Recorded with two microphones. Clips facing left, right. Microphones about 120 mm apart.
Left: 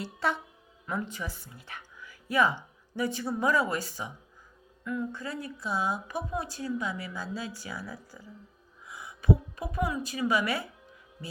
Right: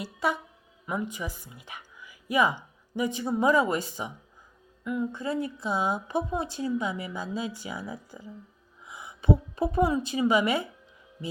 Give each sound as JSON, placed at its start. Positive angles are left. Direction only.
{"t": 0.0, "sound": "a woman's voice", "side_deg": -10}